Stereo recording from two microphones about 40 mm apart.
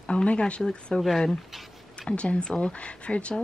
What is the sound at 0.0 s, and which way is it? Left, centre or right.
Speech, left.